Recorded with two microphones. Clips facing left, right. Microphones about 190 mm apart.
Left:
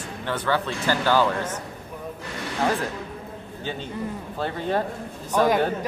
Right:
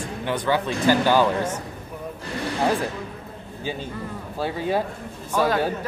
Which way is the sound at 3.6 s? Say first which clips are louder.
Even; 10° right (ahead or behind).